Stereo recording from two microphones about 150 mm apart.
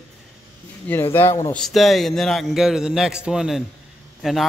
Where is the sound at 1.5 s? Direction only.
Centre (ahead or behind).